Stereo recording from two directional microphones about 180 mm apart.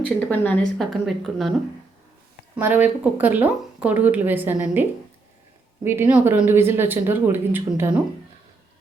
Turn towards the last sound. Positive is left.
turn(degrees=-10)  # may be behind; listen again after turning